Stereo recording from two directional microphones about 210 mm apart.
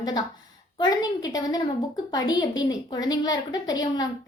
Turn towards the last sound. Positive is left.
turn(degrees=20)  # may be behind; listen again after turning